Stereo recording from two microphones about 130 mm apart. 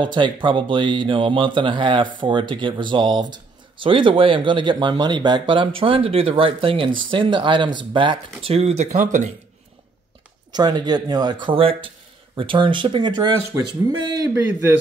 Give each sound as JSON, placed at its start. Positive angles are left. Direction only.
{"t": 0.0, "sound": "speech", "side_deg": -35}
{"t": 10.5, "sound": "speech", "side_deg": -35}